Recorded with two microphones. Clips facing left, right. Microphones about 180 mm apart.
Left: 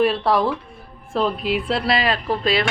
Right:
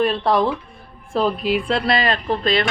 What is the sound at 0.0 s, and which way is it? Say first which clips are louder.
A woman's voice: even; 5° left (ahead or behind).